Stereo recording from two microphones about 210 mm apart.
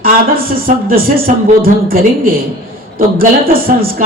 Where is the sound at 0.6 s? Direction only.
45° right (ahead or behind).